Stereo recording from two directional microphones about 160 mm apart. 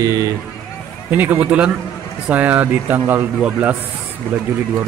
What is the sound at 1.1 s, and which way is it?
A man's voice, 10° right (ahead or behind).